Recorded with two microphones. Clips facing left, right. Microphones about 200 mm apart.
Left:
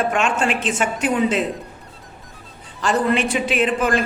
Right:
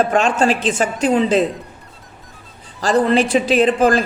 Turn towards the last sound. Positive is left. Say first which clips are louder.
# right 5 dB
turn(degrees=-35)  # may be behind; listen again after turning